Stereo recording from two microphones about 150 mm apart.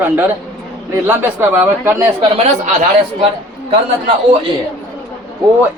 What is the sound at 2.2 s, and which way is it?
Speech, 45° right (ahead or behind).